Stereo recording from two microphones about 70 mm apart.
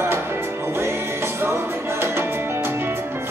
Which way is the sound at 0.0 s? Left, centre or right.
Right.